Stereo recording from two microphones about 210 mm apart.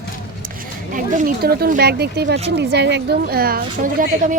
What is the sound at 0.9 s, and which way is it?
A woman's voice, 45° right (ahead or behind).